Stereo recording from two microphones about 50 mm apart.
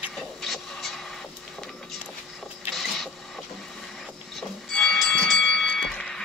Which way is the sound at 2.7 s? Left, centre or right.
Centre.